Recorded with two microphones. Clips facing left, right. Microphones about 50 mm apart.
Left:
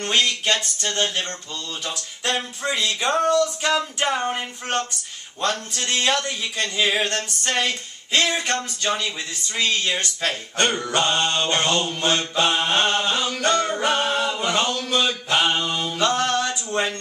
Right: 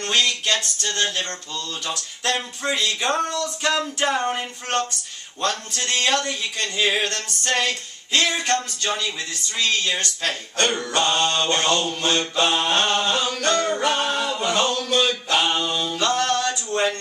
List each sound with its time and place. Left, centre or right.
0.0 s mantra: centre
5.4 s mantra: centre
7.2 s mantra: centre